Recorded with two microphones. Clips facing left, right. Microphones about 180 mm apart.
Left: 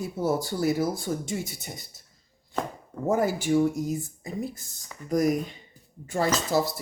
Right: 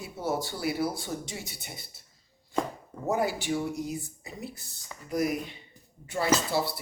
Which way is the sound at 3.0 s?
45° left (ahead or behind).